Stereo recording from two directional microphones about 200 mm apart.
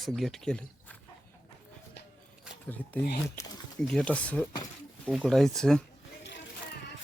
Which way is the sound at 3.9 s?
5° left (ahead or behind).